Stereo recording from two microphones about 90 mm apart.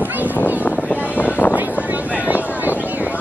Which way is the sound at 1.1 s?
20° left (ahead or behind).